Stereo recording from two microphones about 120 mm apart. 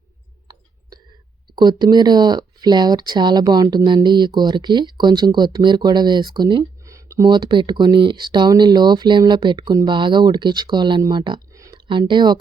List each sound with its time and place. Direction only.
1.5 s speech: 35° right (ahead or behind)
6.9 s a sound: 25° right (ahead or behind)
7.3 s speech: 40° right (ahead or behind)